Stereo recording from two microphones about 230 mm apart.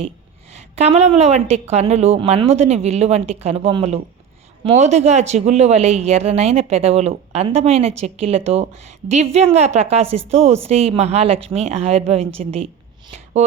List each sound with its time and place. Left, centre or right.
0.5 s a woman's voice: right